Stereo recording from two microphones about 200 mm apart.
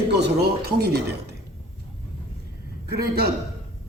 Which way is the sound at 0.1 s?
55° right (ahead or behind).